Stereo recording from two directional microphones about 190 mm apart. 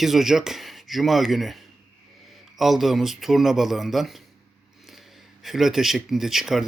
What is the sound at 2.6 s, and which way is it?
Speech, centre (ahead or behind).